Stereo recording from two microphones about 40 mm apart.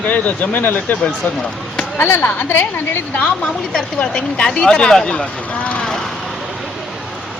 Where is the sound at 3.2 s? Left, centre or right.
Left.